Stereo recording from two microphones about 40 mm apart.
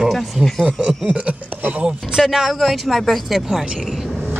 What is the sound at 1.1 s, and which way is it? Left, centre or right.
Speech, right.